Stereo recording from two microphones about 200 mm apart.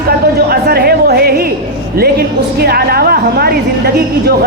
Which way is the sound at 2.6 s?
50° right (ahead or behind).